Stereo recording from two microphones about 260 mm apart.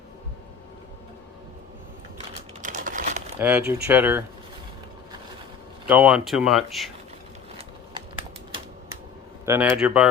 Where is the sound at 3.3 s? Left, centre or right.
Centre.